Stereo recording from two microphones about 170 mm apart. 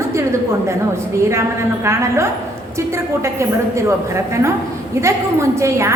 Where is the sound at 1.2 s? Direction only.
15° right (ahead or behind).